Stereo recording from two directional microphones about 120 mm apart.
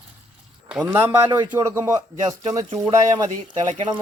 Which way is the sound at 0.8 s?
20° right (ahead or behind).